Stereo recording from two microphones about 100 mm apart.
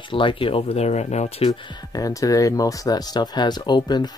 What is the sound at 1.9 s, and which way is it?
Speech, 35° left (ahead or behind).